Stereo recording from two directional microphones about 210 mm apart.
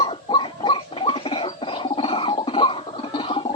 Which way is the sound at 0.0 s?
25° left (ahead or behind).